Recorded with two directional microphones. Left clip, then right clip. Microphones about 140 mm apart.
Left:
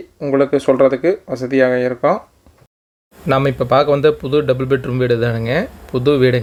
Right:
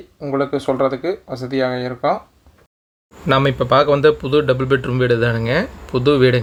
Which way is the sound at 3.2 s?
15° left (ahead or behind).